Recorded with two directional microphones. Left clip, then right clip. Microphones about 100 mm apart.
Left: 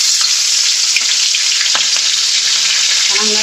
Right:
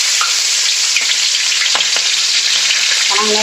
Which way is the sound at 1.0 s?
30° right (ahead or behind).